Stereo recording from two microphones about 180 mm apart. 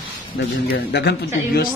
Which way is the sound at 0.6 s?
65° left (ahead or behind).